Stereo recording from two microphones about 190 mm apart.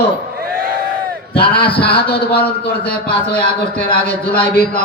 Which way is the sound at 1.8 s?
60° left (ahead or behind).